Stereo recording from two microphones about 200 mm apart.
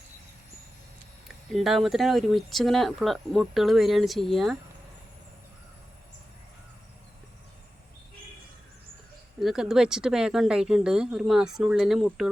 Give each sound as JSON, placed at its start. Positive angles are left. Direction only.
{"t": 1.5, "sound": "speech", "side_deg": 0}
{"t": 9.4, "sound": "speech", "side_deg": 0}